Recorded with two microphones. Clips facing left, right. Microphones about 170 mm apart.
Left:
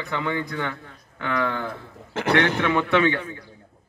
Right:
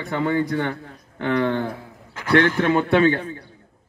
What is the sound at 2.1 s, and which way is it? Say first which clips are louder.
Speech: right 3 dB; 75° left (ahead or behind).